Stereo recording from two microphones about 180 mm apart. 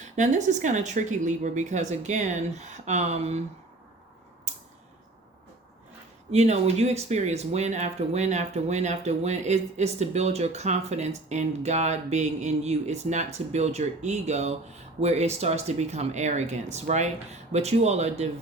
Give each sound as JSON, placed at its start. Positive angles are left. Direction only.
{"t": 0.2, "sound": "speech", "side_deg": -40}
{"t": 4.5, "sound": "mechanisms", "side_deg": -40}
{"t": 6.3, "sound": "speech", "side_deg": -35}